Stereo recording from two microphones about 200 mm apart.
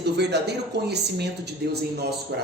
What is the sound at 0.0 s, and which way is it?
A man's voice, 55° right (ahead or behind).